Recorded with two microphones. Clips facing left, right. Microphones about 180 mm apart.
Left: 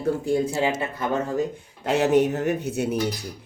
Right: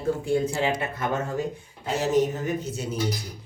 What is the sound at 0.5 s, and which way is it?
Speech, 25° left (ahead or behind).